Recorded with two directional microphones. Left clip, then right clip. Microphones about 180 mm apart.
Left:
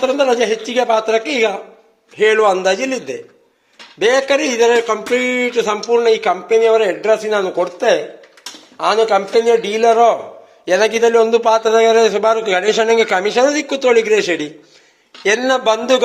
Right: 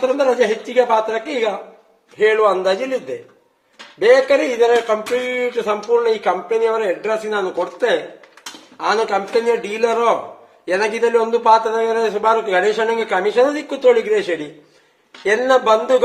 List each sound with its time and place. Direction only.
0.0 s speech: 40° left (ahead or behind)
4.0 s a man's voice: 45° left (ahead or behind)